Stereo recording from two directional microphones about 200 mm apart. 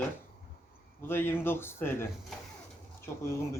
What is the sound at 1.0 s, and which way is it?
Speech, 10° left (ahead or behind).